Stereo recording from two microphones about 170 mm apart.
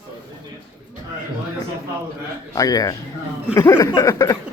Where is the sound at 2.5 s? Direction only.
20° left (ahead or behind).